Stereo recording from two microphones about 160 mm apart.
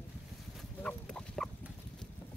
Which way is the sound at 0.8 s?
5° left (ahead or behind).